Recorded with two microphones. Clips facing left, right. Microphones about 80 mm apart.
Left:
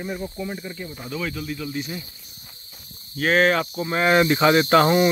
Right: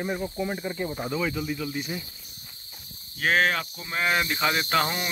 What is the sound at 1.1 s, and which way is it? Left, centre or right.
Speech, centre.